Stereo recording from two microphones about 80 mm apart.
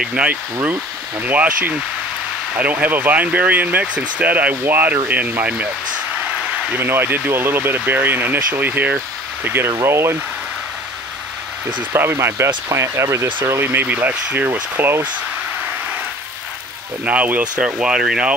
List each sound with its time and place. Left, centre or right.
0.0 s speech: centre
6.7 s speech: right
11.9 s speech: right
17.0 s speech: centre